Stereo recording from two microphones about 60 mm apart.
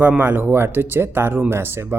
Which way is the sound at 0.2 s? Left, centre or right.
Right.